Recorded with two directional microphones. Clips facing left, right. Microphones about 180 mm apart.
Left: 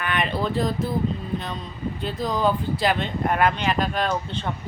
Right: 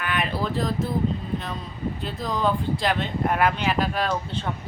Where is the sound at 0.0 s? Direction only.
5° right (ahead or behind).